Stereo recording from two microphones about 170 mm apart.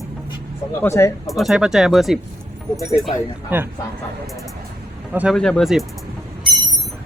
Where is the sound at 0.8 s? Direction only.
15° left (ahead or behind).